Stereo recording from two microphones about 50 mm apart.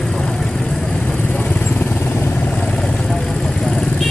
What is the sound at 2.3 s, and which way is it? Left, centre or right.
Vehicle, left.